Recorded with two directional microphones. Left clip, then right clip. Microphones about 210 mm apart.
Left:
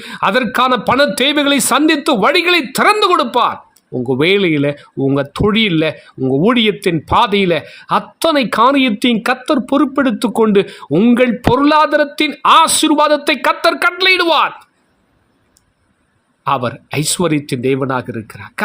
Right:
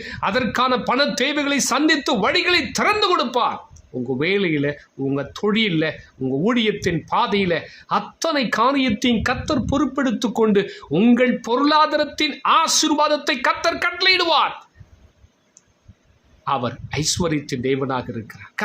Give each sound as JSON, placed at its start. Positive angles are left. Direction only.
{"t": 0.0, "sound": "speech", "side_deg": 40}
{"t": 16.4, "sound": "speech", "side_deg": 35}